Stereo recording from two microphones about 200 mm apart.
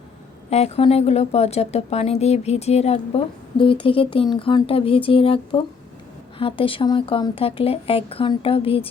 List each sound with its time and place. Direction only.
0.5 s a woman's voice: 30° left (ahead or behind)